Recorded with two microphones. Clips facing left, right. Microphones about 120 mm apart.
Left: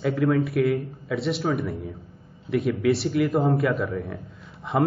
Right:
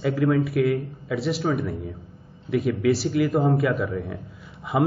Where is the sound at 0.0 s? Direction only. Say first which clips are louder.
Right 1 dB; centre (ahead or behind).